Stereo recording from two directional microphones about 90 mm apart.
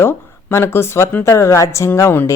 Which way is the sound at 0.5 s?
30° left (ahead or behind).